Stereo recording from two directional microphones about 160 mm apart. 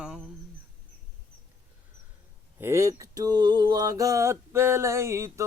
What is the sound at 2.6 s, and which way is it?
Mantra, 15° right (ahead or behind).